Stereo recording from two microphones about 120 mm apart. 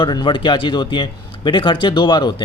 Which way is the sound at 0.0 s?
40° left (ahead or behind).